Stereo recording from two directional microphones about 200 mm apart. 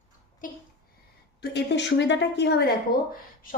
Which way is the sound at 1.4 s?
60° left (ahead or behind).